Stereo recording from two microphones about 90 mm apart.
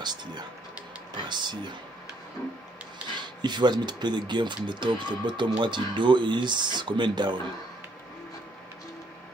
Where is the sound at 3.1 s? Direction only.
55° right (ahead or behind).